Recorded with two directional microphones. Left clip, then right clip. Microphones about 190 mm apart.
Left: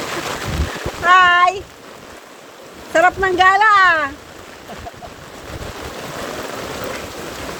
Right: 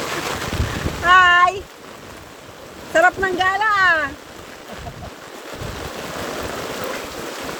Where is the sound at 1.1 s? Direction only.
5° left (ahead or behind).